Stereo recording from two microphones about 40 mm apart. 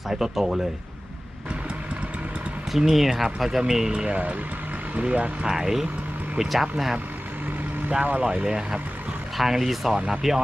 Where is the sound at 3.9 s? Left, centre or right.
Right.